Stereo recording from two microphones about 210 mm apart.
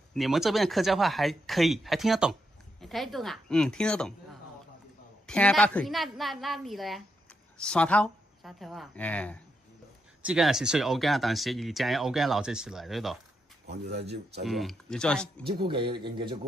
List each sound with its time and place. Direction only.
0.1 s speech: centre (ahead or behind)
13.7 s speech: 50° right (ahead or behind)
14.4 s speech: centre (ahead or behind)
15.4 s a man's voice: 25° right (ahead or behind)